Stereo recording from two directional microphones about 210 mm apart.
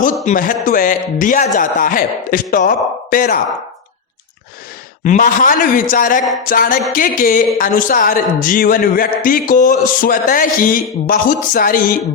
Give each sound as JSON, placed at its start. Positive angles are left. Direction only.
{"t": 0.0, "sound": "speech", "side_deg": 40}
{"t": 5.0, "sound": "speech", "side_deg": 40}